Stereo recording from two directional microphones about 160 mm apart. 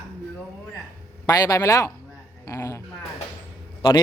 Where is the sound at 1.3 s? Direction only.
20° left (ahead or behind).